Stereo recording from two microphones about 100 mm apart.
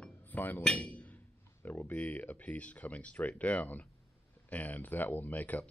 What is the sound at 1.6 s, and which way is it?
Speech, 15° left (ahead or behind).